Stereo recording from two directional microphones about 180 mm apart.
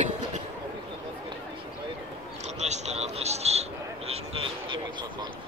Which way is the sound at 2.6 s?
40° right (ahead or behind).